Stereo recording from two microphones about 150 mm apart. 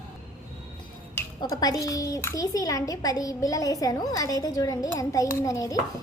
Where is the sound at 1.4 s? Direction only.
25° left (ahead or behind).